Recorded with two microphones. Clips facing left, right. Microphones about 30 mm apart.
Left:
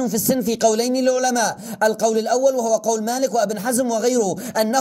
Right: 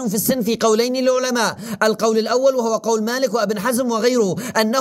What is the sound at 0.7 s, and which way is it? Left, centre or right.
Speech, right.